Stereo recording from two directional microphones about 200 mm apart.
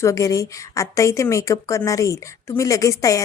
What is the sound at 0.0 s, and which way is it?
A woman's voice, 15° left (ahead or behind).